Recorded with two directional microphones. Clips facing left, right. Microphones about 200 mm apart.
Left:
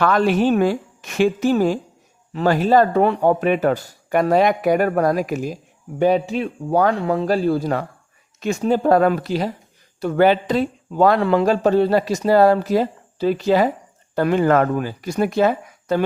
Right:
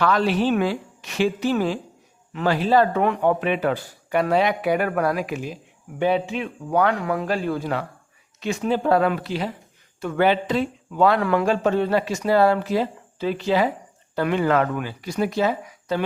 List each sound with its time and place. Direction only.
0.0 s speech: 50° left (ahead or behind)
11.2 s a man's voice: 25° left (ahead or behind)
11.4 s speech: 35° left (ahead or behind)